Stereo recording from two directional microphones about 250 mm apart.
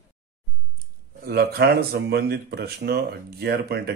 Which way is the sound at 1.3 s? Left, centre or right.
Right.